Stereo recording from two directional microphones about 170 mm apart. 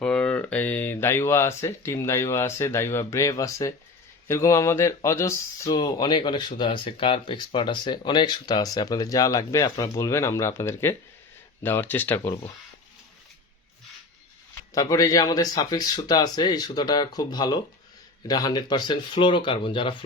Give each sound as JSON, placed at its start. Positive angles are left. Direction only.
{"t": 0.0, "sound": "speech", "side_deg": 5}
{"t": 14.8, "sound": "speech", "side_deg": 20}